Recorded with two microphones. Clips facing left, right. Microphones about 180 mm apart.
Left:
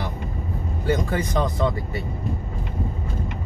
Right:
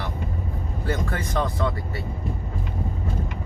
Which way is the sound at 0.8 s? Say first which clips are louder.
Left 5 dB; 15° left (ahead or behind).